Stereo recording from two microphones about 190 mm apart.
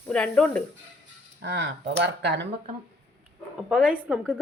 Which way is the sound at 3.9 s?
5° right (ahead or behind).